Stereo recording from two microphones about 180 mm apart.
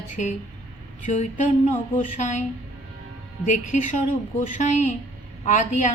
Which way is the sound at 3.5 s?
45° left (ahead or behind).